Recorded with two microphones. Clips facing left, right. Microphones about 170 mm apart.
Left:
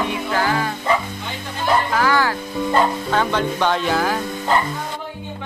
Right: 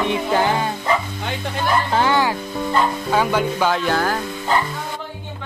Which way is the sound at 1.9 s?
20° right (ahead or behind).